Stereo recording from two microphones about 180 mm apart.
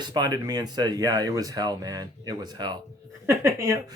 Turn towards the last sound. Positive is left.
turn(degrees=-15)  # may be behind; listen again after turning